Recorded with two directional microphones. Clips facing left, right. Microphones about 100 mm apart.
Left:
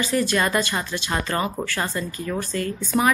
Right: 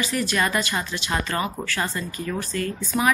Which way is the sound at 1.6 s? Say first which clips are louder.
Left 1 dB; 25° left (ahead or behind).